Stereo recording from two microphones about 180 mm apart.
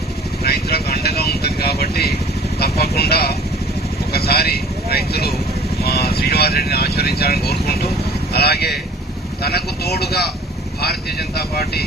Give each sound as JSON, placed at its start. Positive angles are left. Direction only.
{"t": 0.4, "sound": "vehicle", "side_deg": 60}
{"t": 2.6, "sound": "speech", "side_deg": 60}
{"t": 4.1, "sound": "vehicle", "side_deg": 60}
{"t": 5.8, "sound": "speech", "side_deg": 60}